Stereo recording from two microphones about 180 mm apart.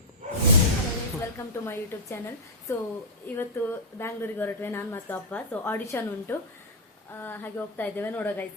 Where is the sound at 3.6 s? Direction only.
15° left (ahead or behind).